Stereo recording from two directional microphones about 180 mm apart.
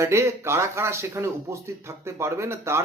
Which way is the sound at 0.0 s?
15° right (ahead or behind).